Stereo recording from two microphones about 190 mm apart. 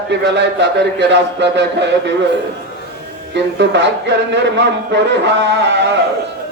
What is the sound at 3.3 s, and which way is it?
Speech, 65° right (ahead or behind).